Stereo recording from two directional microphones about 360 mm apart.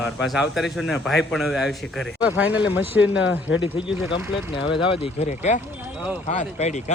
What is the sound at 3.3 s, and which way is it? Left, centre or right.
A man's voice, left.